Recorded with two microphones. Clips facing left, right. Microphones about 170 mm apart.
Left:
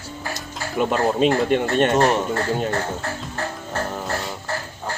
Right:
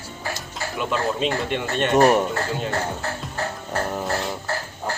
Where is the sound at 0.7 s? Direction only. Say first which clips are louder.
Left 5 dB; 45° left (ahead or behind).